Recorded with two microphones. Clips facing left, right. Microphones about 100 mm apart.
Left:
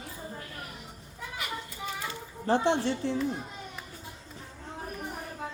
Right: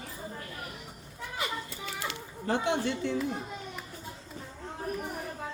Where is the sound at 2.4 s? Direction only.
30° left (ahead or behind).